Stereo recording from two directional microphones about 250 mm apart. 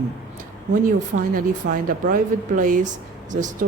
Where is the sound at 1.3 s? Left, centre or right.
Right.